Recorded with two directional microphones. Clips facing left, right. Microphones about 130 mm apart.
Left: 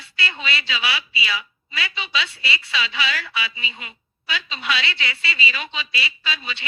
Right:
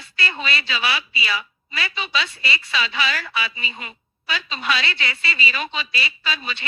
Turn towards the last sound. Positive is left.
turn(degrees=-45)  # may be behind; listen again after turning